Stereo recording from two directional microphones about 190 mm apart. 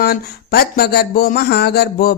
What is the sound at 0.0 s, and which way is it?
Speech, 55° left (ahead or behind).